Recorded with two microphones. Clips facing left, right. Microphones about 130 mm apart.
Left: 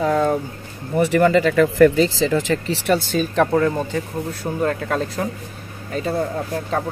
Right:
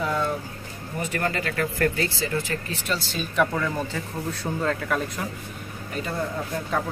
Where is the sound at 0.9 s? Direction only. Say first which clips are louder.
Left 12 dB; 80° left.